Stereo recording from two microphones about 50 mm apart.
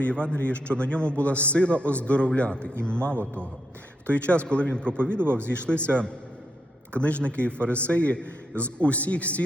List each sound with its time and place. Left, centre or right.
0.0 s a man's voice: left
5.2 s speech: right
5.6 s a man's voice: left
6.9 s a man's voice: left